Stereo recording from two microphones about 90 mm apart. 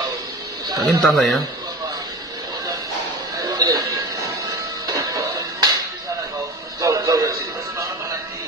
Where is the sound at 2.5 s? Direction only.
45° right (ahead or behind).